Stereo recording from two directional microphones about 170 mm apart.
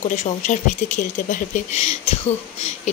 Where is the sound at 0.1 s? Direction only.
45° left (ahead or behind).